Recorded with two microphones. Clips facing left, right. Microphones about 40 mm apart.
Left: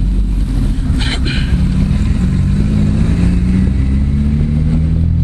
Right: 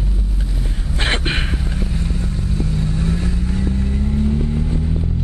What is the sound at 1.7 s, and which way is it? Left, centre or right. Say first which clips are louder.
Vehicle: left 8 dB; left.